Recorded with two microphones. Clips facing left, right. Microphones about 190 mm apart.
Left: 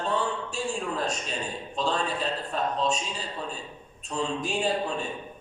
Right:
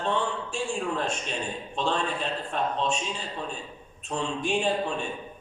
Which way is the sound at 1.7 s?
35° left (ahead or behind).